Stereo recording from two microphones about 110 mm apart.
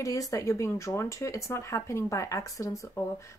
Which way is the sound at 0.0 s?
30° left (ahead or behind).